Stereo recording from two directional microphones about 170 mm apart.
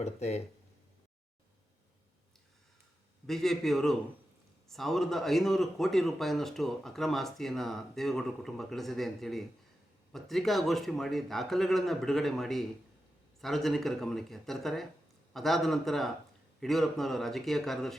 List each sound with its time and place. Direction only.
0.0 s speech: 40° left (ahead or behind)
3.2 s a man's voice: centre (ahead or behind)